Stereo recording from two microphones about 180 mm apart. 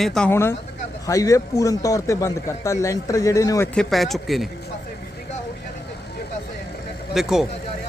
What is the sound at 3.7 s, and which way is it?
Speech, centre (ahead or behind).